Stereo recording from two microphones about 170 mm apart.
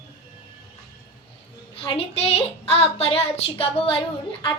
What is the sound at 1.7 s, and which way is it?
A woman's voice, 35° left (ahead or behind).